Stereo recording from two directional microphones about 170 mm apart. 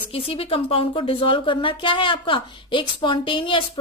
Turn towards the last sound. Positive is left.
turn(degrees=30)  # may be behind; listen again after turning